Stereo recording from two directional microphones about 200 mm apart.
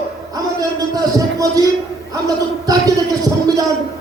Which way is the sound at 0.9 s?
15° right (ahead or behind).